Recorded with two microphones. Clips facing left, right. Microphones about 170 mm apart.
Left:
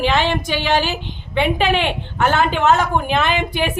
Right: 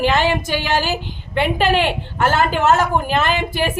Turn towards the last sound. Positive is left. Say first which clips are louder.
# even
turn(degrees=0)  # may be behind; listen again after turning